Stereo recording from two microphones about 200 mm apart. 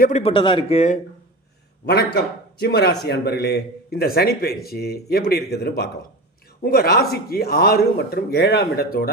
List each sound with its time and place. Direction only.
0.0 s speech: 35° left (ahead or behind)
2.6 s a man's voice: 55° left (ahead or behind)